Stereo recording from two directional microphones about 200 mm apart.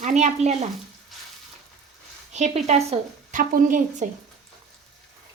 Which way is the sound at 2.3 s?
35° right (ahead or behind).